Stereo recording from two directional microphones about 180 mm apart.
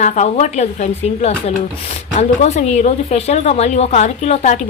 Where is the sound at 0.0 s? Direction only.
40° left (ahead or behind).